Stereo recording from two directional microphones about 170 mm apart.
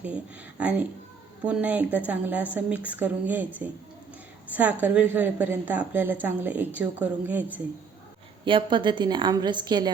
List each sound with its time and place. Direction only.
0.6 s a woman's voice: 10° right (ahead or behind)
8.4 s a woman's voice: 30° right (ahead or behind)